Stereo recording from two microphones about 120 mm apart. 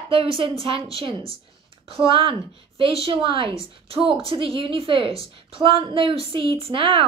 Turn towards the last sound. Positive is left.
turn(degrees=-45)  # may be behind; listen again after turning